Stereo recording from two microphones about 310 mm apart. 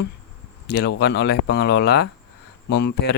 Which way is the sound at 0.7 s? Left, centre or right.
Left.